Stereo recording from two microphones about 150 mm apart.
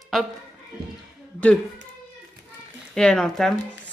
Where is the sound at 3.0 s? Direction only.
5° left (ahead or behind).